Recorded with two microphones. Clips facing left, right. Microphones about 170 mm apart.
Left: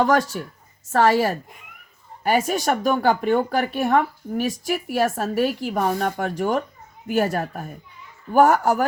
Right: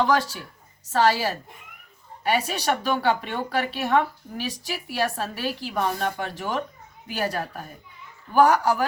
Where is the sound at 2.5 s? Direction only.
45° left (ahead or behind).